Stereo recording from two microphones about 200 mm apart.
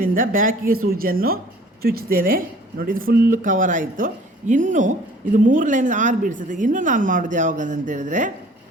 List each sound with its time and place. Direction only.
0.0 s a woman's voice: 45° right (ahead or behind)